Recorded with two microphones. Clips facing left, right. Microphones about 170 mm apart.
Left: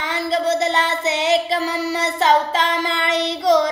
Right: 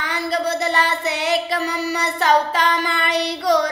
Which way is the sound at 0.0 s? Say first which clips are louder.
Left 2 dB; 25° left (ahead or behind).